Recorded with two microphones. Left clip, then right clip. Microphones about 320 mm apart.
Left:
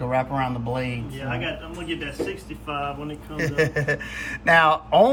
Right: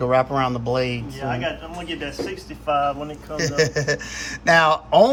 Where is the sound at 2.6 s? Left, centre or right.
Right.